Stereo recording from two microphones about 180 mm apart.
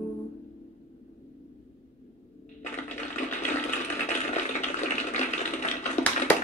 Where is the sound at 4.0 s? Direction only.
40° left (ahead or behind).